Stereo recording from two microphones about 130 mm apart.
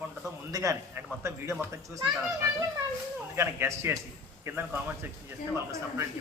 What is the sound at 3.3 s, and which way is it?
Speech, 20° right (ahead or behind).